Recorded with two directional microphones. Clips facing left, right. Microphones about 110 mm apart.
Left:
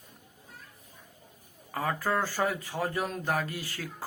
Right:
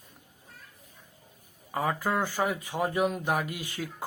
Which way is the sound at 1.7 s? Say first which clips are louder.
Right 1 dB; 15° right (ahead or behind).